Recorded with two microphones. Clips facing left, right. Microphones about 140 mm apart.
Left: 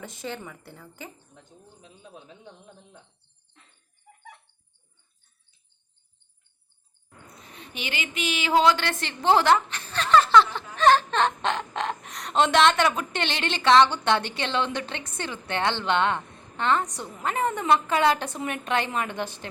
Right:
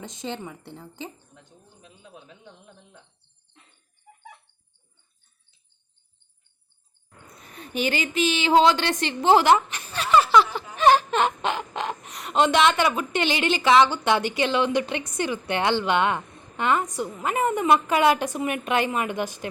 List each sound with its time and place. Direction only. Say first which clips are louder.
0.0 s speech: right 2 dB; 20° right (ahead or behind)
2.2 s speech: left 1 dB; 20° left (ahead or behind)
7.5 s a woman's voice: right 9 dB; 45° right (ahead or behind); by 19.5 s 10° right (ahead or behind)